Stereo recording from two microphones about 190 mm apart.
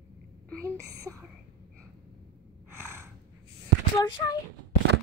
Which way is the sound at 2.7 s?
10° right (ahead or behind).